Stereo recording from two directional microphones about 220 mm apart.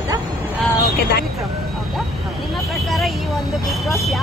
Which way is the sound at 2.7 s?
Centre (ahead or behind).